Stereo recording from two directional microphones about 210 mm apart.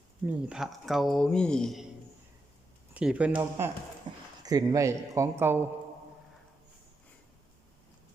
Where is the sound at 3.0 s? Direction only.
5° right (ahead or behind).